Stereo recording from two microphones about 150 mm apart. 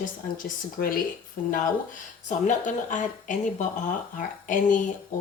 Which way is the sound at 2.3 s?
55° left (ahead or behind).